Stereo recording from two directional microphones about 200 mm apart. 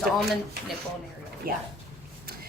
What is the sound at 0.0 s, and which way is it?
Speech, centre (ahead or behind).